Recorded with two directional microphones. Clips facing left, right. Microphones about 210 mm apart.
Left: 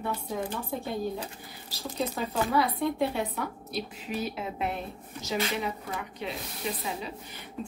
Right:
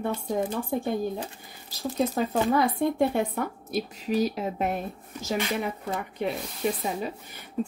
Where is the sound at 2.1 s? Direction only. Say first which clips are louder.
Right 1 dB; 45° right (ahead or behind).